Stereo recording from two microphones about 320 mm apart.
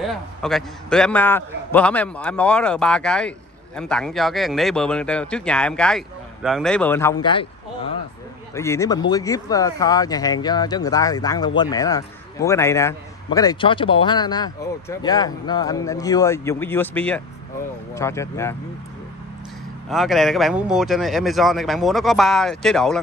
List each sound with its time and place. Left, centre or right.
0.0 s a man's voice: centre
19.9 s a man's voice: centre